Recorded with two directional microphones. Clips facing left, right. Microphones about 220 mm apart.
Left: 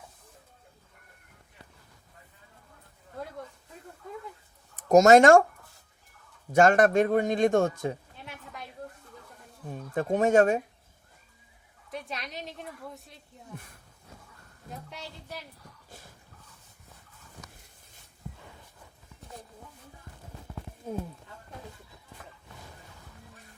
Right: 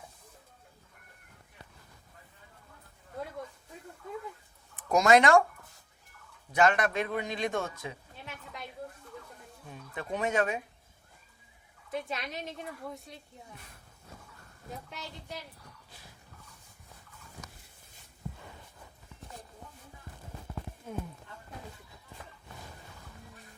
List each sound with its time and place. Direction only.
4.8 s speech: 45° left (ahead or behind)
6.5 s a man's voice: 45° left (ahead or behind)
9.6 s a man's voice: 45° left (ahead or behind)
11.9 s a woman's voice: centre (ahead or behind)
20.9 s speech: 35° left (ahead or behind)